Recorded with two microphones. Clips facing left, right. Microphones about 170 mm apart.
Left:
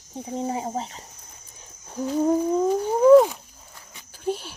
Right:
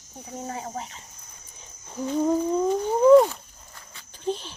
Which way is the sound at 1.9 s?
5° left (ahead or behind).